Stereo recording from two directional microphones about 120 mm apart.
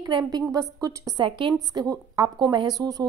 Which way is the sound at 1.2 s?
40° right (ahead or behind).